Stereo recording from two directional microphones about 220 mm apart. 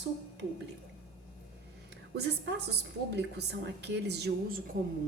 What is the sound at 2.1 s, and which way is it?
A woman's voice, 50° right (ahead or behind).